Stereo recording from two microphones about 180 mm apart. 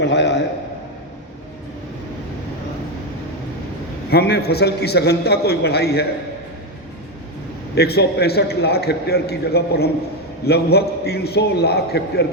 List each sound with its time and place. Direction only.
0.0 s a man's voice: 75° left (ahead or behind)
4.1 s a man's voice: 65° left (ahead or behind)
7.8 s a man's voice: 65° left (ahead or behind)